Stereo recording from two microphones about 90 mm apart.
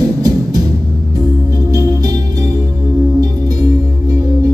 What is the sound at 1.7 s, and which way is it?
Music, 40° right (ahead or behind).